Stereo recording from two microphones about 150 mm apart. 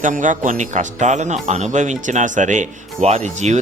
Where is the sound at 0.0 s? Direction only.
60° right (ahead or behind).